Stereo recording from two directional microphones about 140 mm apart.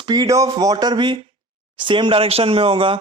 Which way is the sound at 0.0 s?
30° right (ahead or behind).